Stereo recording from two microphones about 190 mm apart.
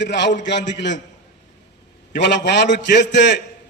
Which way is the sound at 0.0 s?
65° left (ahead or behind).